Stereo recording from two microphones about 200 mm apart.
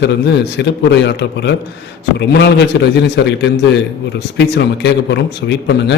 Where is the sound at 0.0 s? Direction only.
60° left (ahead or behind).